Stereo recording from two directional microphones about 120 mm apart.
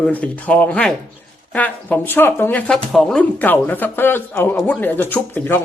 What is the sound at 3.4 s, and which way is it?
A man's voice, 15° left (ahead or behind).